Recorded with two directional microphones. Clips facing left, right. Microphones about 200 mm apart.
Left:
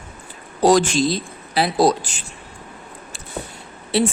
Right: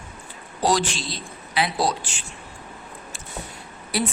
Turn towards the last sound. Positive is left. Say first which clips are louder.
# left 7 dB
turn(degrees=25)  # may be behind; listen again after turning